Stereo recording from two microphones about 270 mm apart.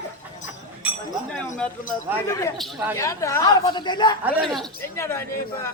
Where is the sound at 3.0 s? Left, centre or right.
Centre.